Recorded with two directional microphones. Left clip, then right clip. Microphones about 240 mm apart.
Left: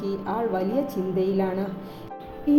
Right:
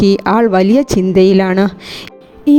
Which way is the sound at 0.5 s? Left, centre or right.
Right.